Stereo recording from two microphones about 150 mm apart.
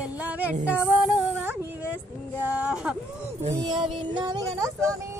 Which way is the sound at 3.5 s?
25° right (ahead or behind).